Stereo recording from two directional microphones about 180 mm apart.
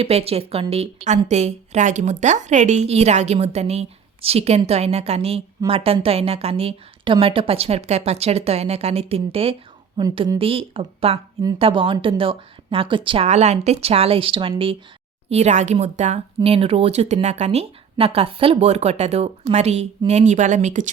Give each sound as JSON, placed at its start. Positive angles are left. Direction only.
{"t": 0.0, "sound": "a woman's voice", "side_deg": -35}